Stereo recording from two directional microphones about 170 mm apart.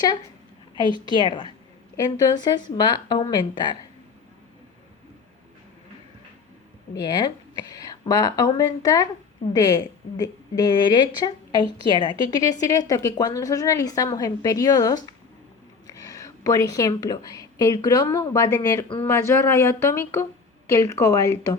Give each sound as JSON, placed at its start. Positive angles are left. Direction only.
{"t": 1.0, "sound": "a woman's voice", "side_deg": 25}
{"t": 6.9, "sound": "a woman's voice", "side_deg": 25}